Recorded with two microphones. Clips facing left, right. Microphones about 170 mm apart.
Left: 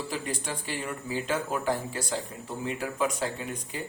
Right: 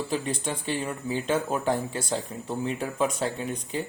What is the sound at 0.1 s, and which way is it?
Speech, 25° right (ahead or behind).